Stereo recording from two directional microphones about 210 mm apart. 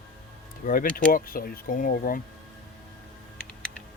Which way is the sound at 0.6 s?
40° left (ahead or behind).